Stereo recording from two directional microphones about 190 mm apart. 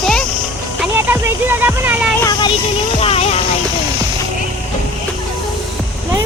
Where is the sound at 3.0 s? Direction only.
30° left (ahead or behind).